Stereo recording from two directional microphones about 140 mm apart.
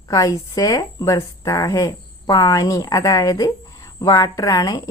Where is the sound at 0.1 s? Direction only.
25° left (ahead or behind).